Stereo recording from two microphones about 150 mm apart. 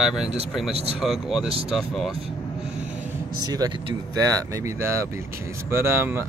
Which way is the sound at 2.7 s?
5° right (ahead or behind).